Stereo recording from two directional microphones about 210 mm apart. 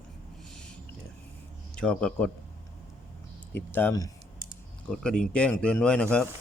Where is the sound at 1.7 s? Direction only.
5° left (ahead or behind).